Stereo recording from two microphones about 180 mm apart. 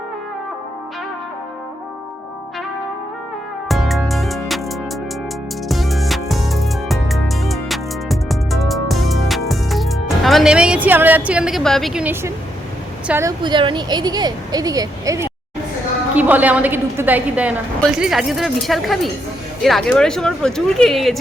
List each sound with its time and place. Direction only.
3.7 s music: centre (ahead or behind)
5.6 s music: centre (ahead or behind)
9.5 s speech: centre (ahead or behind)
13.1 s a woman's voice: 15° right (ahead or behind)
13.4 s a woman's voice: 25° right (ahead or behind); by 21.2 s centre (ahead or behind)